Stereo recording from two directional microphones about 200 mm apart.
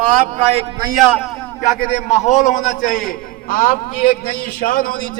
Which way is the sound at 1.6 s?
35° left (ahead or behind).